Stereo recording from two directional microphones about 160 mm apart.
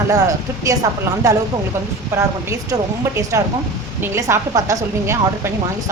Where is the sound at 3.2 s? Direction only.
20° right (ahead or behind).